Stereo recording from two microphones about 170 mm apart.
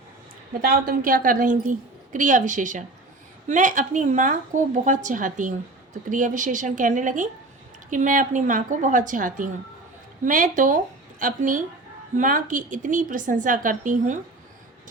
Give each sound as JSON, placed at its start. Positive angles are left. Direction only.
{"t": 0.6, "sound": "a woman's voice", "side_deg": -60}